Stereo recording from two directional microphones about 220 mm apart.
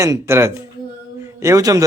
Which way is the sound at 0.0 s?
15° right (ahead or behind).